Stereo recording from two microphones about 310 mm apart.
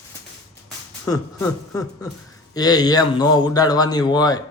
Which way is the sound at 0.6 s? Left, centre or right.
Centre.